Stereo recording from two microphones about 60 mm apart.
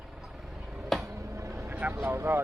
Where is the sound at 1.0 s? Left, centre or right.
Right.